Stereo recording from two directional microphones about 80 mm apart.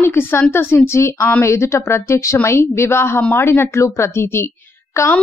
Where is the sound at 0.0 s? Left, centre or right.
Left.